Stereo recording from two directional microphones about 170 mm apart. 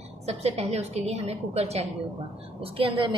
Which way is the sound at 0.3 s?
40° right (ahead or behind).